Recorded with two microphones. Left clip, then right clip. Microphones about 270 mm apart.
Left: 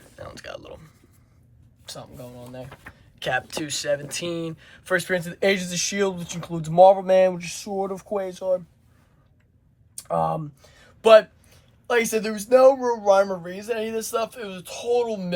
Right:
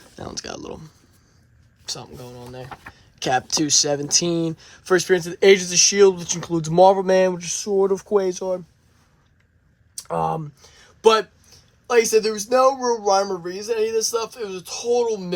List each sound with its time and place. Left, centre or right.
0.2 s speech: centre
1.9 s speech: right
3.2 s speech: centre
10.0 s speech: right